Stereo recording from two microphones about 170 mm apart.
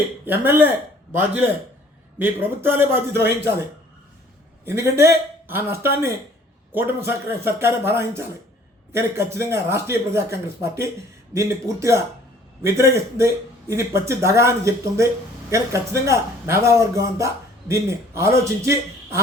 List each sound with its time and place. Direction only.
0.3 s a man's voice: 10° right (ahead or behind)
4.6 s a man's voice: 15° right (ahead or behind)